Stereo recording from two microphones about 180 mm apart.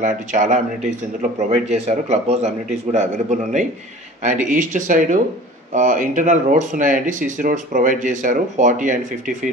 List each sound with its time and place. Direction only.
0.0 s a man's voice: 45° right (ahead or behind)